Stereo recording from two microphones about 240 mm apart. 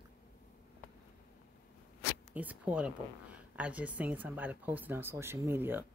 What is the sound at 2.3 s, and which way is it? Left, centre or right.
Speech, centre.